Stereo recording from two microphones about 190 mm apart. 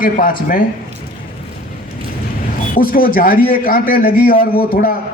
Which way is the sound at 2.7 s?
50° left (ahead or behind).